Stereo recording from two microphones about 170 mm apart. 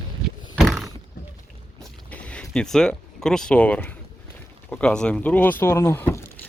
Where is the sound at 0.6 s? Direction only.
Centre (ahead or behind).